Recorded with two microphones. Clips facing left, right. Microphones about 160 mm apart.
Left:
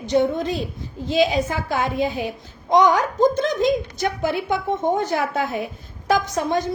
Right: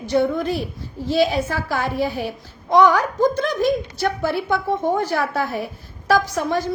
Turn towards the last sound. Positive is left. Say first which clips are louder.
# even
turn(degrees=20)  # may be behind; listen again after turning